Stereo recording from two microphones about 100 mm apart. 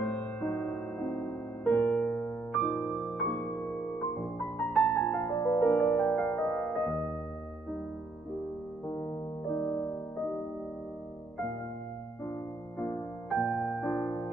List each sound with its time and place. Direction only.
0.0 s music: 15° left (ahead or behind)
4.7 s music: 5° left (ahead or behind)
5.2 s music: 15° left (ahead or behind)
9.5 s music: 10° left (ahead or behind)
12.7 s music: 20° left (ahead or behind)